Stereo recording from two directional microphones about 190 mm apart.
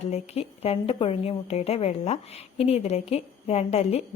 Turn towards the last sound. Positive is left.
turn(degrees=35)  # may be behind; listen again after turning